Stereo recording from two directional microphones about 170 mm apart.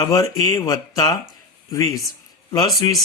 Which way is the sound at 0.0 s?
20° left (ahead or behind).